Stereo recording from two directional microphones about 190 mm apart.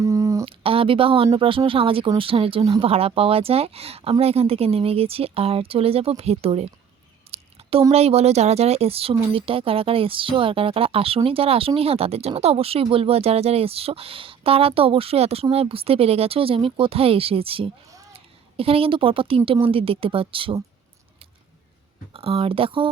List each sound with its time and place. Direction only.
0.0 s a sound: 15° right (ahead or behind)
0.4 s a woman's voice: 30° right (ahead or behind)
22.1 s speech: 30° right (ahead or behind)